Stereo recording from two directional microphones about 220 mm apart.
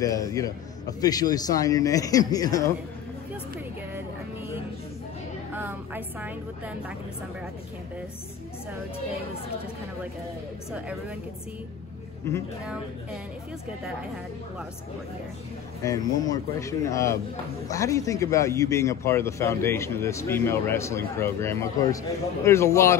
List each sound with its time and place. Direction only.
0.0 s a man's voice: 15° left (ahead or behind)
5.5 s a woman's voice: 10° right (ahead or behind)
10.7 s speech: 5° right (ahead or behind)
12.3 s a man's voice: 15° left (ahead or behind)
15.8 s a man's voice: 15° left (ahead or behind)